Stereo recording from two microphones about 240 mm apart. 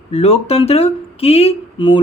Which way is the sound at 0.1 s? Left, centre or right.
Left.